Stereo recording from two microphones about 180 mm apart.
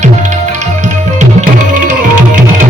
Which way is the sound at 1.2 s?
40° right (ahead or behind).